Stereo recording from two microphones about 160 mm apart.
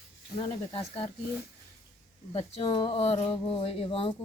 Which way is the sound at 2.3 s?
40° left (ahead or behind).